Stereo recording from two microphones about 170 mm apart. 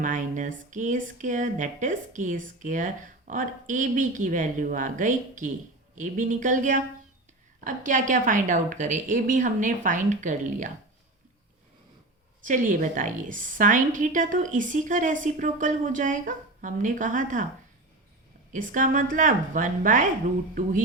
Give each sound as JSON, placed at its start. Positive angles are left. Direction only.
{"t": 0.0, "sound": "speech", "side_deg": -50}
{"t": 12.4, "sound": "speech", "side_deg": -50}
{"t": 18.5, "sound": "speech", "side_deg": -50}